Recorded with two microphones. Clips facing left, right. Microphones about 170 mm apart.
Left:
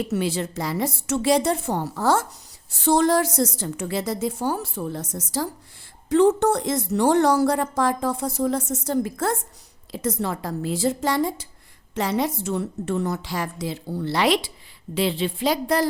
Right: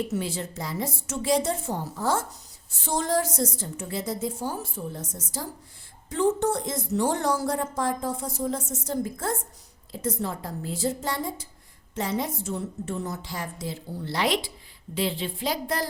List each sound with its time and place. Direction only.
0.1 s a woman's voice: 75° left (ahead or behind)